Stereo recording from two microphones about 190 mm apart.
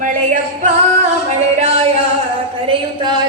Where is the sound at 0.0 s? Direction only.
40° right (ahead or behind).